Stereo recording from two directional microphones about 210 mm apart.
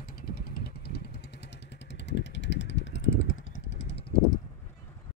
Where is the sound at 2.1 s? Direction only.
60° left (ahead or behind).